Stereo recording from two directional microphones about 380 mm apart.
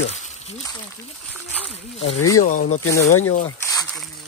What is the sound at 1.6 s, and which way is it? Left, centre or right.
Speech, centre.